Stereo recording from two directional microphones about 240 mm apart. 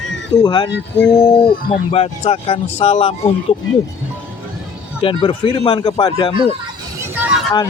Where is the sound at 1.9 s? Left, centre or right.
Left.